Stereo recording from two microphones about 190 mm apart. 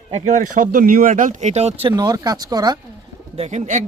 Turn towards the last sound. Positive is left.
turn(degrees=-40)  # may be behind; listen again after turning